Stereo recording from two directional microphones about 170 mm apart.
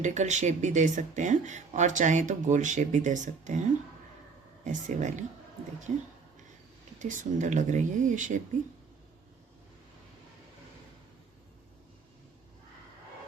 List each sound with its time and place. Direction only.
0.0 s speech: 45° right (ahead or behind)
4.6 s speech: 45° right (ahead or behind)
7.0 s speech: 50° right (ahead or behind)